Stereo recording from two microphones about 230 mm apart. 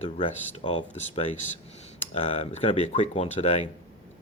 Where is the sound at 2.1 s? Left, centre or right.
Left.